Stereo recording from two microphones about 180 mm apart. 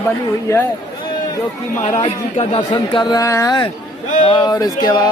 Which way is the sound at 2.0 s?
35° left (ahead or behind).